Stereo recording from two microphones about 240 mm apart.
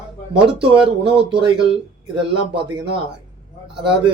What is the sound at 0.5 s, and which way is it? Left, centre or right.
Speech, centre.